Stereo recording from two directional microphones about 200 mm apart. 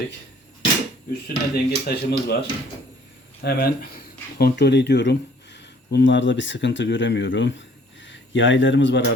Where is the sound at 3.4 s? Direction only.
50° left (ahead or behind).